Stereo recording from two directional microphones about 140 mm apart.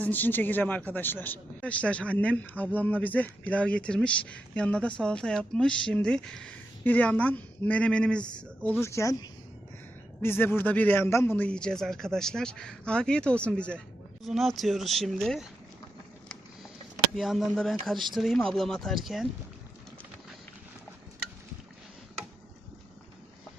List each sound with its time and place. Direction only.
0.0 s speech: 15° left (ahead or behind)
17.2 s speech: centre (ahead or behind)